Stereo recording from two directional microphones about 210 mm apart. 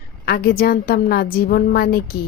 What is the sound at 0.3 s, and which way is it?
Speech, 45° left (ahead or behind).